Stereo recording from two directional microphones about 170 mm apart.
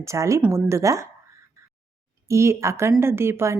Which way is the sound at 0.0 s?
15° right (ahead or behind).